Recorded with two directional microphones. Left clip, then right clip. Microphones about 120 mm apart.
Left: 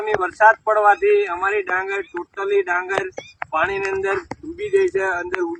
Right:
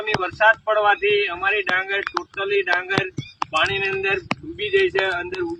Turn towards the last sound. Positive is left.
turn(degrees=-45)  # may be behind; listen again after turning